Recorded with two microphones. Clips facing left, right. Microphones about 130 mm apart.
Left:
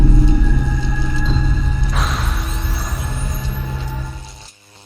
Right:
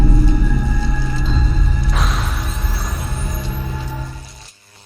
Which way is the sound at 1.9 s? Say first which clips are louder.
Even; centre (ahead or behind).